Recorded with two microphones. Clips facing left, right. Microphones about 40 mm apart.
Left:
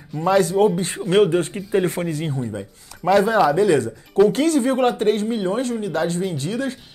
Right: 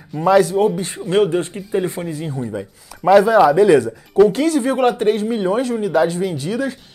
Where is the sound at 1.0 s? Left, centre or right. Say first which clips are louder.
Even; left.